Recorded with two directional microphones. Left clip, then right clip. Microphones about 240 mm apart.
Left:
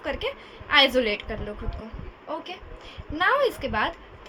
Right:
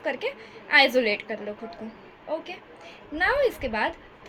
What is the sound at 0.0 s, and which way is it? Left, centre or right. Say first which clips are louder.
A woman's voice: right 1 dB; centre.